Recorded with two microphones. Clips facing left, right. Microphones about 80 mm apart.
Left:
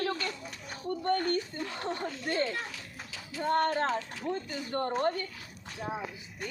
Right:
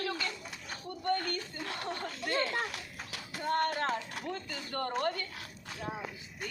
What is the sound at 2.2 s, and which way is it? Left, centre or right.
Speech, right.